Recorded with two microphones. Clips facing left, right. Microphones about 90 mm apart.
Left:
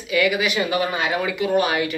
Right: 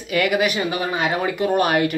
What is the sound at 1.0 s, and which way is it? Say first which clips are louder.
Speech: right 2 dB; 35° right (ahead or behind).